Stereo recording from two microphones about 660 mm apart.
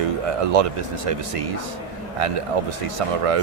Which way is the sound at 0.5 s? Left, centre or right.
Right.